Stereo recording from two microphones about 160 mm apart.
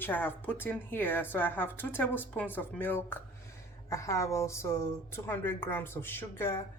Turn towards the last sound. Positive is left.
turn(degrees=15)  # may be behind; listen again after turning